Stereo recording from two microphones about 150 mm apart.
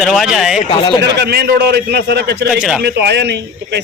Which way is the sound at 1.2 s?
90° right.